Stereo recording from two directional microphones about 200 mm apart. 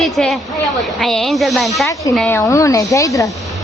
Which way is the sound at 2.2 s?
10° left (ahead or behind).